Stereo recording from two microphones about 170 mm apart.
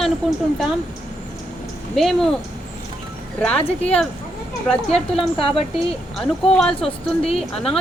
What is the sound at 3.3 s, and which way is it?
Speech, 5° left (ahead or behind).